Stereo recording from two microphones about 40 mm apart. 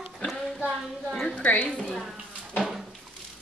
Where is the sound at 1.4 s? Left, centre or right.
Left.